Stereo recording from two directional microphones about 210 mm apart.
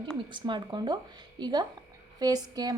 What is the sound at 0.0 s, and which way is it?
A woman's voice, 20° right (ahead or behind).